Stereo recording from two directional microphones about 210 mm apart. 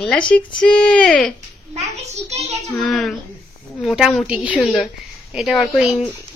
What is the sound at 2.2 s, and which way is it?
Speech, 30° right (ahead or behind).